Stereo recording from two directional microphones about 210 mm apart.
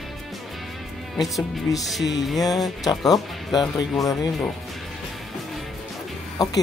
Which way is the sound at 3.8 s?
15° left (ahead or behind).